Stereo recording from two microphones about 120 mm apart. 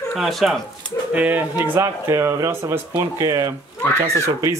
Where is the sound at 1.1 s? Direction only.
15° right (ahead or behind).